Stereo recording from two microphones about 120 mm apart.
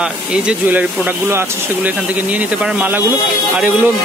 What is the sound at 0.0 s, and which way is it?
Speech, 10° right (ahead or behind).